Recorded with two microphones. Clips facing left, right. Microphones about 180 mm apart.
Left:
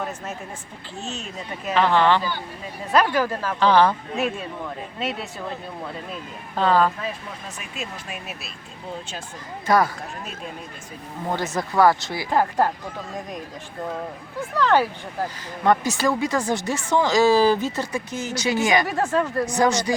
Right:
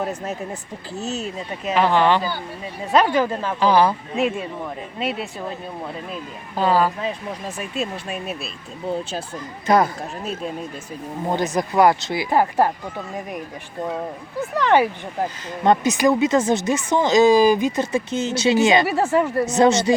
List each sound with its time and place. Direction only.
1.7 s speech: 15° right (ahead or behind)
3.6 s speech: 10° right (ahead or behind)
6.6 s speech: 10° right (ahead or behind)
7.0 s speech: 35° right (ahead or behind)
9.6 s speech: 20° right (ahead or behind)
11.3 s speech: 20° right (ahead or behind)
14.6 s speech: 15° right (ahead or behind)